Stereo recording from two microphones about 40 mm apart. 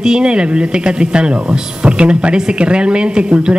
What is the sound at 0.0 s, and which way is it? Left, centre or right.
Speech, right.